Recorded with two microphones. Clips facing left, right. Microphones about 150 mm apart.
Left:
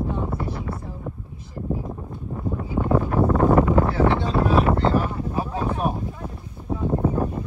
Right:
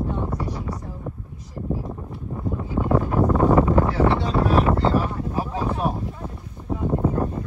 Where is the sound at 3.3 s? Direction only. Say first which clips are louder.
Even; 15° right (ahead or behind).